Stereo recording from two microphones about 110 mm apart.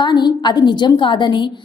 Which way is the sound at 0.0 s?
40° left (ahead or behind).